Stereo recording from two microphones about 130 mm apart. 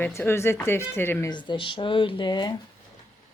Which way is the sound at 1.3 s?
35° left (ahead or behind).